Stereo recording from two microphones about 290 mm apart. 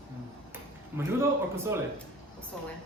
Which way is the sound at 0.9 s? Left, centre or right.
Centre.